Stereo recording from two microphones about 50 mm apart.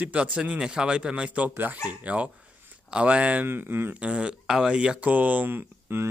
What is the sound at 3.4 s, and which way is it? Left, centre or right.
Speech, right.